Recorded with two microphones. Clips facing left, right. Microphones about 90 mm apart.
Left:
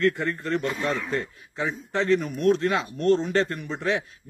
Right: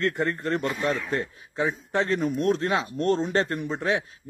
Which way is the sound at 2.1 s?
35° right (ahead or behind).